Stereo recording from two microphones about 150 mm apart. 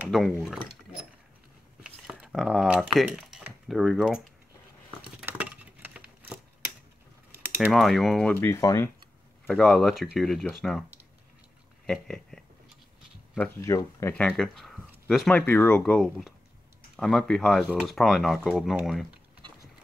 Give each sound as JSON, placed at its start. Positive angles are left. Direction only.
{"t": 0.1, "sound": "speech", "side_deg": 0}
{"t": 1.8, "sound": "a sound", "side_deg": -5}
{"t": 3.6, "sound": "speech", "side_deg": 0}
{"t": 5.2, "sound": "a sound", "side_deg": -10}
{"t": 7.3, "sound": "typing", "side_deg": -15}
{"t": 7.7, "sound": "speech", "side_deg": 0}
{"t": 9.5, "sound": "speech", "side_deg": 0}
{"t": 11.8, "sound": "speech", "side_deg": 5}
{"t": 13.6, "sound": "speech", "side_deg": 20}
{"t": 14.1, "sound": "speech", "side_deg": 5}